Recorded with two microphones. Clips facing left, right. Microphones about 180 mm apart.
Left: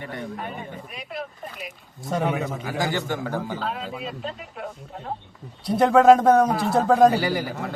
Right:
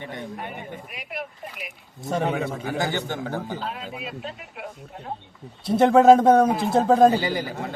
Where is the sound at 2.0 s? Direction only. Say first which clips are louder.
Even; 30° right (ahead or behind).